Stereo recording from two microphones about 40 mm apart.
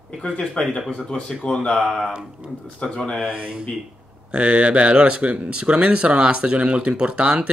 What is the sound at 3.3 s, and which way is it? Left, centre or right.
Speech, right.